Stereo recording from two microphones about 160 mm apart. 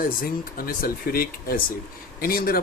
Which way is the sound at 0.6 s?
65° left (ahead or behind).